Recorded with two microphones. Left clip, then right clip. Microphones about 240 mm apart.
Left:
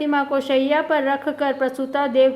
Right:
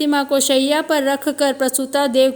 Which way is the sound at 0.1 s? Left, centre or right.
Right.